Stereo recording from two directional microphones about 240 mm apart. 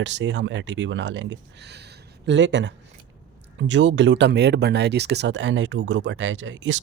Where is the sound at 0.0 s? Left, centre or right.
Right.